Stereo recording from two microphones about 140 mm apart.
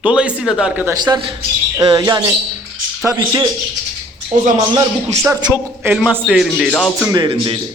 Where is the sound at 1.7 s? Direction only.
25° right (ahead or behind).